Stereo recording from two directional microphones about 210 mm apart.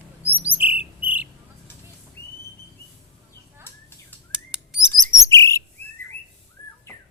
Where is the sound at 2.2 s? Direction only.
50° left (ahead or behind).